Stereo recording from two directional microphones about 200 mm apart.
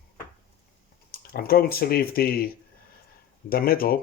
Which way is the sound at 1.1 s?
50° left (ahead or behind).